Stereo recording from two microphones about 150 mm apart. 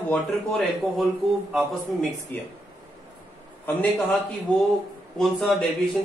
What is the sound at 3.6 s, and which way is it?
Speech, 10° left (ahead or behind).